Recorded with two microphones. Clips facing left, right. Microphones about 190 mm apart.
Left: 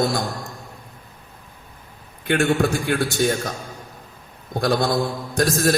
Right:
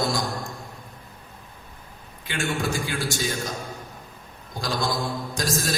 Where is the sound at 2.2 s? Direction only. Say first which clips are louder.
Left 8 dB; 60° left (ahead or behind).